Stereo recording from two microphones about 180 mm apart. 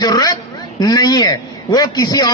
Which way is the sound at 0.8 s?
20° left (ahead or behind).